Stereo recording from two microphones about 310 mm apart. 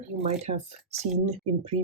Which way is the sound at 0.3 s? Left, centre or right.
Right.